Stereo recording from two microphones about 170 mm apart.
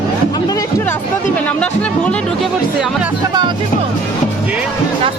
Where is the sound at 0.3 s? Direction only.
25° left (ahead or behind).